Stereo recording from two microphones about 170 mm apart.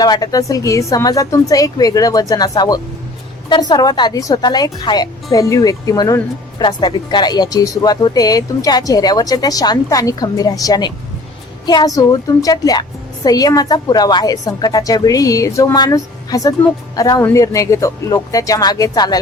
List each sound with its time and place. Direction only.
0.0 s a woman's voice: 25° left (ahead or behind)